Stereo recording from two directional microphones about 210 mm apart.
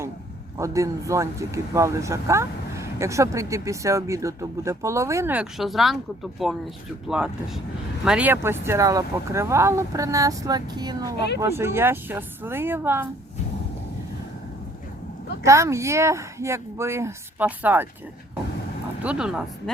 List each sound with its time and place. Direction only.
0.5 s speech: 15° right (ahead or behind)
15.4 s speech: 15° right (ahead or behind)
19.0 s speech: 5° right (ahead or behind)